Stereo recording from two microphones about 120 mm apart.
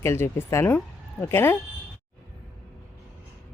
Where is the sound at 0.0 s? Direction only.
20° left (ahead or behind).